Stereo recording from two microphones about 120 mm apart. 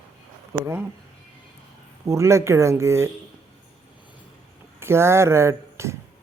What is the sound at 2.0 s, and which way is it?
Speech, 25° right (ahead or behind).